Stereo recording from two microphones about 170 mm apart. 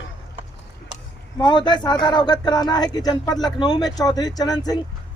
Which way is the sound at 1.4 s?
25° left (ahead or behind).